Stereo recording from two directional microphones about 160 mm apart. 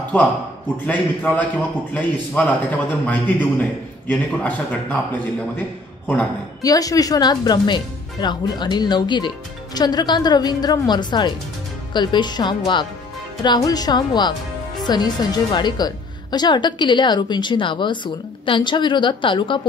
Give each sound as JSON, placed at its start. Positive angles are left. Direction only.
{"t": 0.8, "sound": "a man's voice", "side_deg": 10}
{"t": 6.6, "sound": "a woman's voice", "side_deg": 20}